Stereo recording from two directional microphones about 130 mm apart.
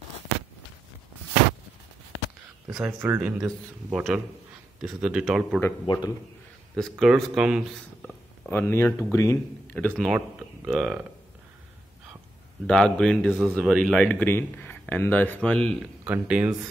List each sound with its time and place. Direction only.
2.7 s speech: 15° right (ahead or behind)
5.9 s a man's voice: 35° left (ahead or behind)
6.7 s speech: centre (ahead or behind)
8.0 s speech: 15° left (ahead or behind)
9.8 s speech: centre (ahead or behind)
12.6 s speech: 5° left (ahead or behind)
14.1 s speech: 15° left (ahead or behind)
16.0 s speech: 10° right (ahead or behind)